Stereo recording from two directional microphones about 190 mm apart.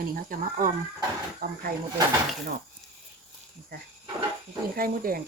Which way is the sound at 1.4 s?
55° right (ahead or behind).